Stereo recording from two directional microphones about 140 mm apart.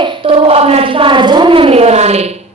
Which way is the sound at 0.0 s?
40° right (ahead or behind).